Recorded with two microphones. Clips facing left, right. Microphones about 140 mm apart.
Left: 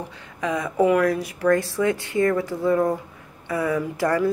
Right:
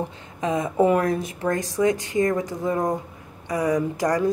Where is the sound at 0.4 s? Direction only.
25° right (ahead or behind).